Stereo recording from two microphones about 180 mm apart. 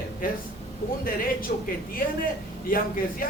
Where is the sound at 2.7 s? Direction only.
55° left (ahead or behind).